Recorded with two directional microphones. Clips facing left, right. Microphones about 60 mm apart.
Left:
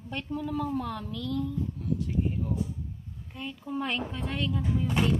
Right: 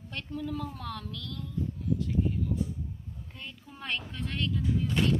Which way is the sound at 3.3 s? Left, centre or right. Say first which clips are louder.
Left 14 dB; centre.